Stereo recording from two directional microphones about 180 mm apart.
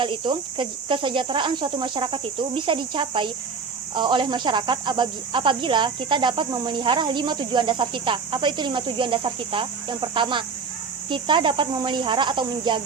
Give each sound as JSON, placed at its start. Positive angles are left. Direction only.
{"t": 0.0, "sound": "speech", "side_deg": -25}